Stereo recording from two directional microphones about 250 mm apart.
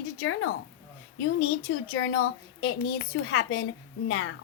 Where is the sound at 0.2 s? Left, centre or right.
Left.